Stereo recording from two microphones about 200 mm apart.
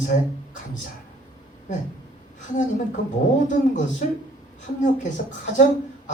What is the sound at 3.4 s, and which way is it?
Speech, 40° left (ahead or behind).